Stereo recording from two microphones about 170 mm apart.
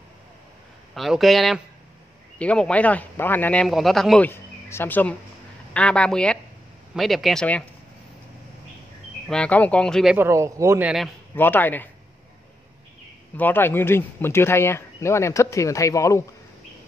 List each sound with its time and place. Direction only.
0.9 s speech: centre (ahead or behind)
3.6 s speech: centre (ahead or behind)
4.3 s speech: 15° left (ahead or behind)
9.3 s speech: 5° left (ahead or behind)
10.1 s speech: 15° right (ahead or behind)
11.3 s speech: 10° left (ahead or behind)
13.4 s speech: 10° left (ahead or behind)